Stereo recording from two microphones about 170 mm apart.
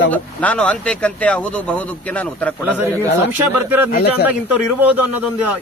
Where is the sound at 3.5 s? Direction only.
10° right (ahead or behind).